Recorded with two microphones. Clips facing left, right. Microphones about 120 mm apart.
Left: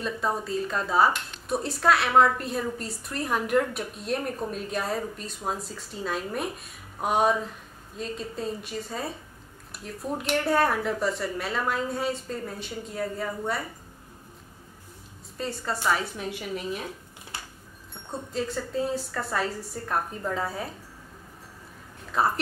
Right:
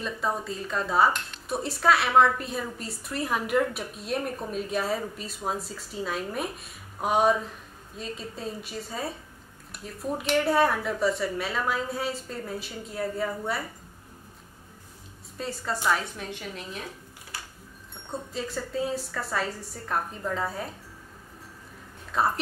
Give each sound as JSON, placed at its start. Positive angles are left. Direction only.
{"t": 0.0, "sound": "speech", "side_deg": 0}
{"t": 15.3, "sound": "a woman's voice", "side_deg": 0}
{"t": 17.3, "sound": "a sound", "side_deg": 25}
{"t": 18.3, "sound": "speech", "side_deg": 0}
{"t": 22.1, "sound": "speech", "side_deg": 0}